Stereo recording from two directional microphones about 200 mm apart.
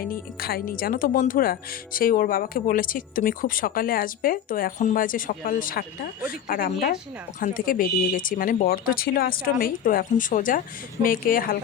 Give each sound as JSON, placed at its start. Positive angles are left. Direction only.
{"t": 0.1, "sound": "speech", "side_deg": 50}